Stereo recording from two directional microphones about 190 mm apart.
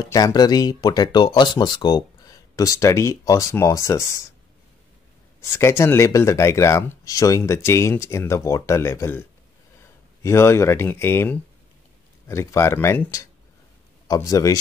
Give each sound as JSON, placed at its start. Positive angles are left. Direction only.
{"t": 0.0, "sound": "speech", "side_deg": 20}
{"t": 5.4, "sound": "speech", "side_deg": 15}
{"t": 10.2, "sound": "speech", "side_deg": 15}